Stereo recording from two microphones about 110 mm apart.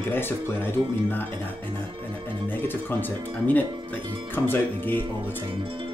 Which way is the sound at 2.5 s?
20° left (ahead or behind).